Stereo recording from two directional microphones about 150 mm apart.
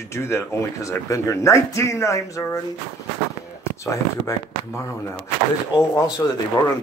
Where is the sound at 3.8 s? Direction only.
20° left (ahead or behind).